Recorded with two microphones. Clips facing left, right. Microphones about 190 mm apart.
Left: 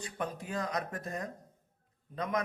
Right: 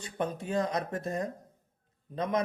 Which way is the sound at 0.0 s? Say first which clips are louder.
Right 4 dB; 25° right (ahead or behind).